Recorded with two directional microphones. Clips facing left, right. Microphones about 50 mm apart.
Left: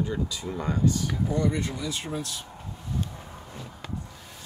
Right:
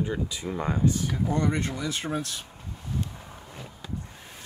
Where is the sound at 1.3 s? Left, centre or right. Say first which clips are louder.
Even; right.